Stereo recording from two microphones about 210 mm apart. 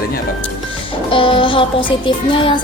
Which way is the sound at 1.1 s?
25° left (ahead or behind).